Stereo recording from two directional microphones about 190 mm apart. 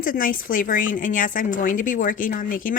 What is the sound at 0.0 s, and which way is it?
Speech, 45° left (ahead or behind).